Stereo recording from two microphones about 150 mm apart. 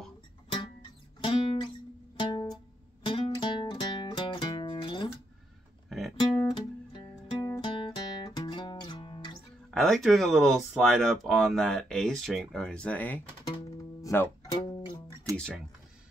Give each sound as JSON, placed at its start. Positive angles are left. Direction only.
{"t": 1.2, "sound": "guitar", "side_deg": 35}
{"t": 2.1, "sound": "music", "side_deg": 35}
{"t": 5.9, "sound": "music", "side_deg": 0}
{"t": 6.1, "sound": "music", "side_deg": 30}
{"t": 9.8, "sound": "speech", "side_deg": 0}
{"t": 14.5, "sound": "music", "side_deg": 40}
{"t": 15.3, "sound": "music", "side_deg": 5}